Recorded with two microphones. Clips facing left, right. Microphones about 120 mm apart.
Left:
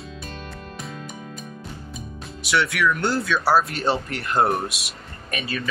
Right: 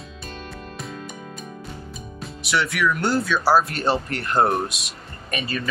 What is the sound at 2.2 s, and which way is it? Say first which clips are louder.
Speech: left 1 dB; centre (ahead or behind).